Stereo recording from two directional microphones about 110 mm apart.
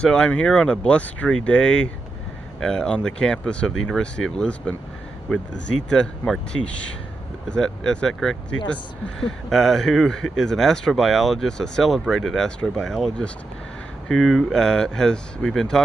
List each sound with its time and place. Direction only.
0.0 s speech: 10° left (ahead or behind)